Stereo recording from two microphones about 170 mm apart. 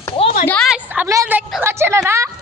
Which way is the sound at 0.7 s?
5° right (ahead or behind).